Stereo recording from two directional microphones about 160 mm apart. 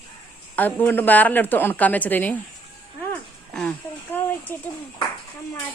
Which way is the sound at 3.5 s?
10° left (ahead or behind).